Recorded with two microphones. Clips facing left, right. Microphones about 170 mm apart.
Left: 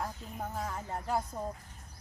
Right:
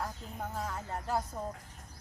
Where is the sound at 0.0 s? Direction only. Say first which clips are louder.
Left 1 dB; 10° left (ahead or behind).